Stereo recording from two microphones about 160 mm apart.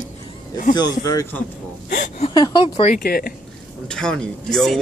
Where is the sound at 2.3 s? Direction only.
25° left (ahead or behind).